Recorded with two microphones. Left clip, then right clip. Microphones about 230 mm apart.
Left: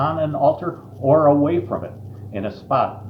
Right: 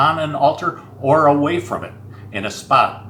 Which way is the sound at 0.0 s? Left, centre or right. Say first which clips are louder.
Right 3 dB; right.